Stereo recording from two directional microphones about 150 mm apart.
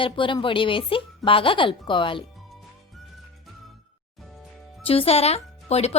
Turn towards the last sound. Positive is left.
turn(degrees=45)  # may be behind; listen again after turning